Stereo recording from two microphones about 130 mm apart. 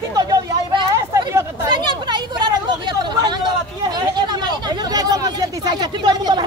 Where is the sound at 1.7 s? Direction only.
35° right (ahead or behind).